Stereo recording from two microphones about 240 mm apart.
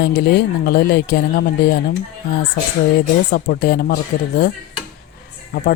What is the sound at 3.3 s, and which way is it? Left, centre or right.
Speech, left.